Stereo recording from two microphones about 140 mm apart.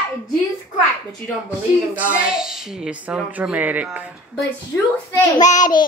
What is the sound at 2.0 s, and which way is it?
A woman's voice, 10° right (ahead or behind).